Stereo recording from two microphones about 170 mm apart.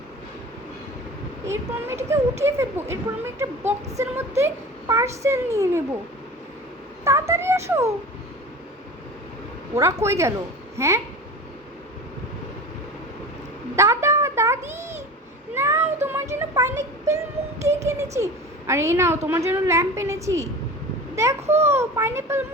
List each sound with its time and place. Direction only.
1.5 s a woman's voice: 15° right (ahead or behind)
7.0 s a woman's voice: 15° right (ahead or behind)
9.7 s a woman's voice: 20° right (ahead or behind)
13.7 s a sound: 15° right (ahead or behind)
14.6 s a sound: 45° right (ahead or behind)
15.5 s a sound: 15° right (ahead or behind)
16.3 s a woman's voice: 15° right (ahead or behind)
21.4 s a child's voice: 40° right (ahead or behind)
21.7 s a woman's voice: 15° right (ahead or behind)